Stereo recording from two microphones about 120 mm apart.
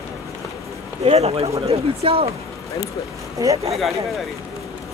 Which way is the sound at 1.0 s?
55° right (ahead or behind).